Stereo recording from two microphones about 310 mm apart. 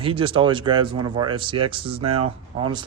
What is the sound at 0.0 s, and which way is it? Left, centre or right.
A man's voice, centre.